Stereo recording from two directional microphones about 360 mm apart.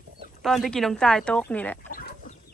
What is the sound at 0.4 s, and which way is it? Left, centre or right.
Speech, centre.